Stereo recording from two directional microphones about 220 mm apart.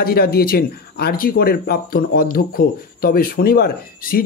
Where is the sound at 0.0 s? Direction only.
45° left (ahead or behind).